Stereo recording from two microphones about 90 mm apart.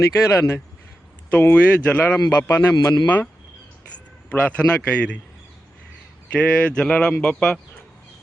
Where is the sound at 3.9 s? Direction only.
15° left (ahead or behind).